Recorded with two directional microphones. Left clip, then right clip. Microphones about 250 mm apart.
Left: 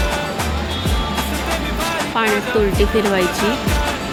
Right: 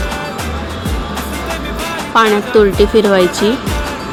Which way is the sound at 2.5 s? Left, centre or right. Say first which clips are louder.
Right 7 dB; centre.